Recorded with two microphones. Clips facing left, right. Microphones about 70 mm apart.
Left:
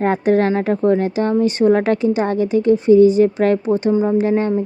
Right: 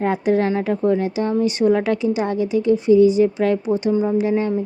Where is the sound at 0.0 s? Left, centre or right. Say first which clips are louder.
Left 3 dB; left.